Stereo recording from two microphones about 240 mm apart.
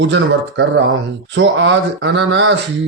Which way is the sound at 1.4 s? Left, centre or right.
Right.